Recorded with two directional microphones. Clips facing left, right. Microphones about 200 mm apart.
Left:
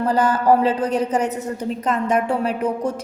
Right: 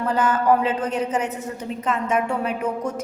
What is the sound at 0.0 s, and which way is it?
A woman's voice, 35° left (ahead or behind).